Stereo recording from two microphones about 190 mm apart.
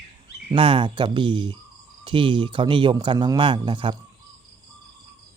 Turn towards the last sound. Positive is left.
turn(degrees=-25)  # may be behind; listen again after turning